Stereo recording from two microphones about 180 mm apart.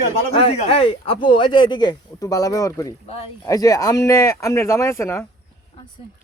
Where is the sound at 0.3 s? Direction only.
35° left (ahead or behind); by 5.2 s 15° left (ahead or behind).